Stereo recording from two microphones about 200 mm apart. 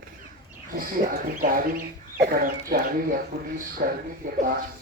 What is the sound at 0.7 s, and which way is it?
Speech, 45° right (ahead or behind).